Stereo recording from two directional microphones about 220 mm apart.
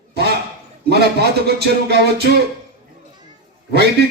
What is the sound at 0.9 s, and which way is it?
A man's voice, 45° right (ahead or behind).